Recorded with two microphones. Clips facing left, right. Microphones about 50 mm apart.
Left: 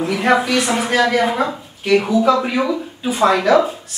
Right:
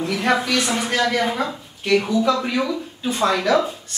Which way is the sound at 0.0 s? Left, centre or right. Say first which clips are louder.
Left 4 dB; centre.